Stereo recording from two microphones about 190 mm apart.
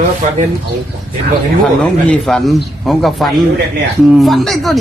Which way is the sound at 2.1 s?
Centre (ahead or behind).